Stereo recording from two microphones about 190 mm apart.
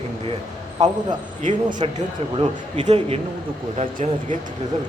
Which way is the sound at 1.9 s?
35° right (ahead or behind).